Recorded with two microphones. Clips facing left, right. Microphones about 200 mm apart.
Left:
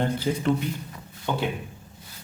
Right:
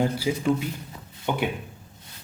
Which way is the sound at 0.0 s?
10° right (ahead or behind).